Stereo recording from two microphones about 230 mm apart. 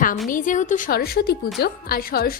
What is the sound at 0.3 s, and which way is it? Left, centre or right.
A woman's voice, left.